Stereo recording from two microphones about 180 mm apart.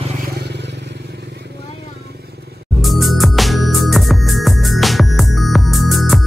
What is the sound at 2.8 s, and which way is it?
Music, centre (ahead or behind).